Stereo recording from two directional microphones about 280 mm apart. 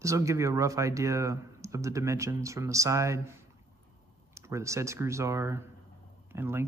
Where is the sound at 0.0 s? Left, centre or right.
Centre.